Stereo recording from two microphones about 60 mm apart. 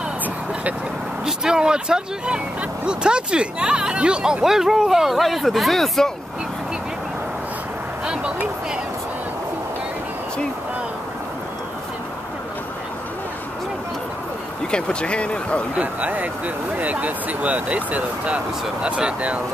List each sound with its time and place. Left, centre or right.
1.2 s speech: centre
8.0 s vehicle: centre
14.7 s speech: centre
15.7 s speech: right